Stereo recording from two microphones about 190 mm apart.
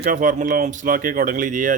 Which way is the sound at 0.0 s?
45° right (ahead or behind).